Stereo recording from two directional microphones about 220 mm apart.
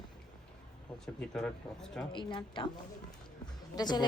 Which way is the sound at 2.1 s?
20° left (ahead or behind).